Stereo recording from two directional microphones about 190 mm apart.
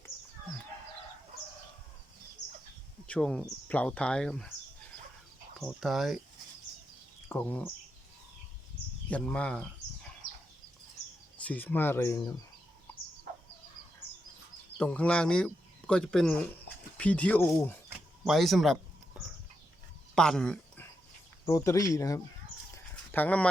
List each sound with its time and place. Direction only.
3.1 s speech: 5° left (ahead or behind)
5.5 s speech: centre (ahead or behind)
7.3 s speech: 10° left (ahead or behind)
9.0 s speech: 5° left (ahead or behind)
11.4 s speech: 10° left (ahead or behind)
12.9 s bird: 10° left (ahead or behind)
14.8 s speech: 5° left (ahead or behind)
17.8 s a sound: centre (ahead or behind)
20.1 s speech: 5° left (ahead or behind)
21.4 s speech: 15° left (ahead or behind)